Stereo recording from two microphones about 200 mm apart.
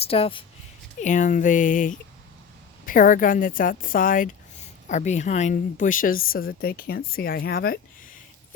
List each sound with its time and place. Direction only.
0.0 s speech: 30° left (ahead or behind)
1.0 s a woman's voice: 40° left (ahead or behind)